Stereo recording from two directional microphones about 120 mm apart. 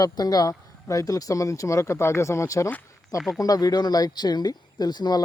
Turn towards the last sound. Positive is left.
turn(degrees=35)  # may be behind; listen again after turning